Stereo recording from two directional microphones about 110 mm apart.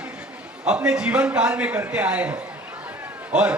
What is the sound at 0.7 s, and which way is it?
A man's voice, 10° right (ahead or behind).